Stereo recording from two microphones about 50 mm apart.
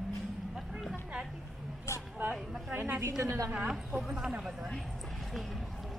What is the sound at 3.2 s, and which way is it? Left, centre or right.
Speech, right.